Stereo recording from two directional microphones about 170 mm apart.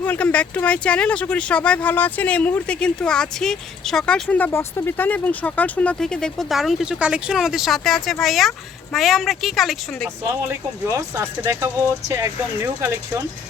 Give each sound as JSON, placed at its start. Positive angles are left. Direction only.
{"t": 0.0, "sound": "speech", "side_deg": 10}
{"t": 10.4, "sound": "speech", "side_deg": -15}